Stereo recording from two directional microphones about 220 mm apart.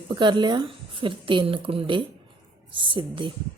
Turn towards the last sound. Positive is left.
turn(degrees=-20)  # may be behind; listen again after turning